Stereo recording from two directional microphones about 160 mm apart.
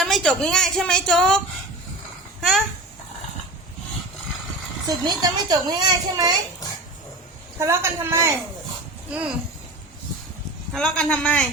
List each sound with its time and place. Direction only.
0.0 s a woman's voice: 5° left (ahead or behind)
2.4 s speech: centre (ahead or behind)
4.9 s a woman's voice: 25° right (ahead or behind)
7.6 s a man's voice: 15° right (ahead or behind)
10.7 s a woman's voice: 5° left (ahead or behind)